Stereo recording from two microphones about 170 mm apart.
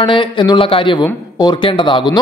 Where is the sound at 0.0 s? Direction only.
30° left (ahead or behind).